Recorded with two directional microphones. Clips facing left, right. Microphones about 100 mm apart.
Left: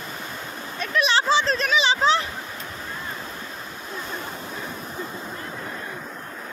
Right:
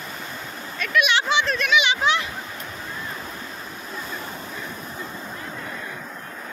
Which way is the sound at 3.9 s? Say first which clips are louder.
Left 1 dB; 5° left (ahead or behind).